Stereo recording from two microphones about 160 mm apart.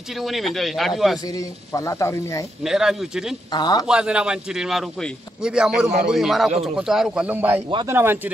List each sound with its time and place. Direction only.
0.2 s a man's voice: centre (ahead or behind)
1.2 s speech: 20° left (ahead or behind)
2.6 s a man's voice: 5° right (ahead or behind)
3.5 s speech: 25° left (ahead or behind)
3.8 s a man's voice: 5° right (ahead or behind)